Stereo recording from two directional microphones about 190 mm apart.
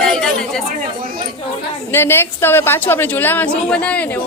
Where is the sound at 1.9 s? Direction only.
10° left (ahead or behind).